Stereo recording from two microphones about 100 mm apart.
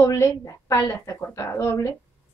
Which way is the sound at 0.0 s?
30° left (ahead or behind).